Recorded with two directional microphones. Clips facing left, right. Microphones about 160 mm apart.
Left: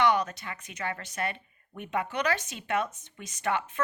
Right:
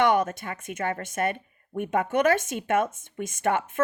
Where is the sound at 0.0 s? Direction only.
50° right (ahead or behind).